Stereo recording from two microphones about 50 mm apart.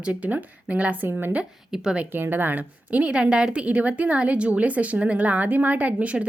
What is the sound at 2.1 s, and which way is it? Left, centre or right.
A woman's voice, right.